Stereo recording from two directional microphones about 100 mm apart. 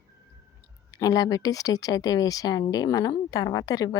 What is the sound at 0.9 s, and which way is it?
Speech, 40° left (ahead or behind).